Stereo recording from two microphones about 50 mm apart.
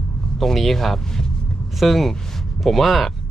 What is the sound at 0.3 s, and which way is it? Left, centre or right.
Speech, centre.